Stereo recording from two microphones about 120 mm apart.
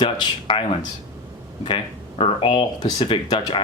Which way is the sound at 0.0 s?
50° left (ahead or behind).